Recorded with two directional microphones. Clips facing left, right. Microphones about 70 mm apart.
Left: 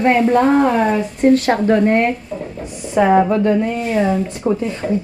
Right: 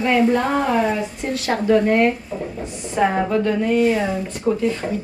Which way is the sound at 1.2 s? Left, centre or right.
Left.